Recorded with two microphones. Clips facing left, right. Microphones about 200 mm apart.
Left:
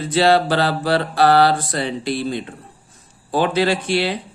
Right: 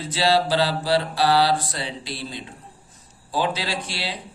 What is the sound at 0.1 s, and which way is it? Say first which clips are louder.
Mantra: left 5 dB; 55° left (ahead or behind).